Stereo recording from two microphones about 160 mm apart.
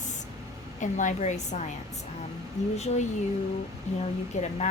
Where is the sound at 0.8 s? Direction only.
50° left (ahead or behind).